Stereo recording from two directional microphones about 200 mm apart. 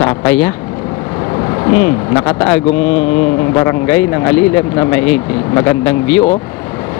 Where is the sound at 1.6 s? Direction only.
20° left (ahead or behind).